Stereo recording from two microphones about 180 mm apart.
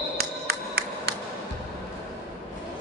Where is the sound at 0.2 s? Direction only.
65° right (ahead or behind).